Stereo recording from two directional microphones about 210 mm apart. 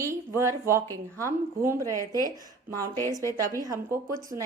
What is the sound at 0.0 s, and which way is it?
Speech, 15° right (ahead or behind).